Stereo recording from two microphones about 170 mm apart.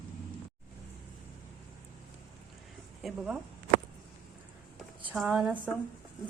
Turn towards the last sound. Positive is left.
turn(degrees=-5)  # may be behind; listen again after turning